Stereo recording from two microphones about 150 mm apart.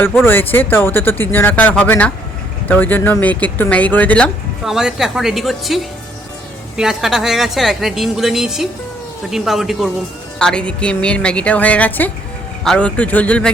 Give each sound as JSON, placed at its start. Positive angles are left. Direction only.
{"t": 0.3, "sound": "speech", "side_deg": 15}
{"t": 4.6, "sound": "a woman's voice", "side_deg": -5}